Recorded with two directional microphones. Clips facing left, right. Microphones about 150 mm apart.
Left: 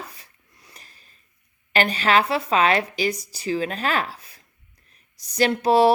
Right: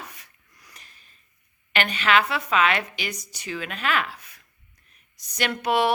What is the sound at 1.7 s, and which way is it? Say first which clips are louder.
Speech: left 2 dB; 35° left (ahead or behind).